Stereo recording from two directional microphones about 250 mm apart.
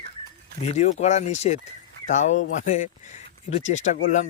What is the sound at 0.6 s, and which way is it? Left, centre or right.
Speech, left.